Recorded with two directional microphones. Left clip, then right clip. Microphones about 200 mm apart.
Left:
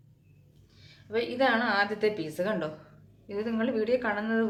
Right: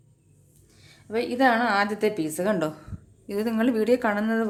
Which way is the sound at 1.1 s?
50° right (ahead or behind).